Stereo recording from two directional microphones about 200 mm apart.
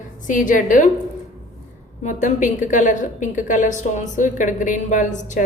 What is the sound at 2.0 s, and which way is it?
A woman's voice, 40° left (ahead or behind).